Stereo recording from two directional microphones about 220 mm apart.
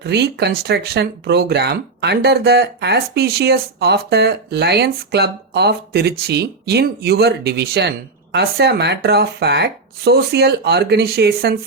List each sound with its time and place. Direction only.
0.0 s speech: 50° right (ahead or behind)